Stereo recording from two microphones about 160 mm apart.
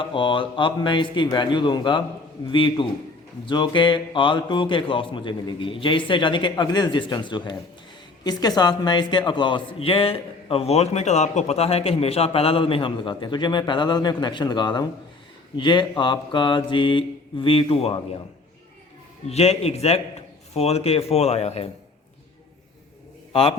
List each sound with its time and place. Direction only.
0.0 s a man's voice: 30° left (ahead or behind)
19.3 s a man's voice: 40° left (ahead or behind)
23.3 s a man's voice: 35° left (ahead or behind)